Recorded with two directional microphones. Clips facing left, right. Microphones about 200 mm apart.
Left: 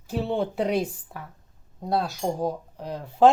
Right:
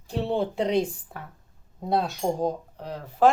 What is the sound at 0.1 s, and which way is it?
Speech, centre (ahead or behind).